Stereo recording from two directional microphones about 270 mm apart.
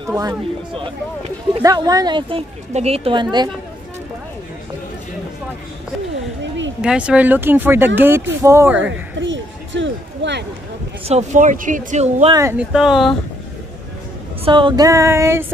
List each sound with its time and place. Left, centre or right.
0.1 s speech: centre
6.8 s speech: centre
9.2 s a sound: right
11.1 s speech: right
12.4 s speech: centre
14.4 s speech: centre